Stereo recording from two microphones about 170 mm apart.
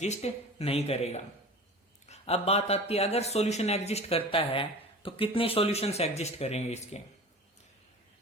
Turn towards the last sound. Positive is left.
turn(degrees=40)  # may be behind; listen again after turning